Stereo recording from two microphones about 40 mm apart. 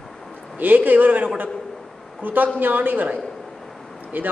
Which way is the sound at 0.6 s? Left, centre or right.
Right.